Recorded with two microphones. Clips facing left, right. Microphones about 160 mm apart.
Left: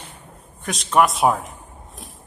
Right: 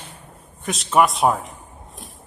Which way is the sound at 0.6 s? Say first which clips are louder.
Even; centre (ahead or behind).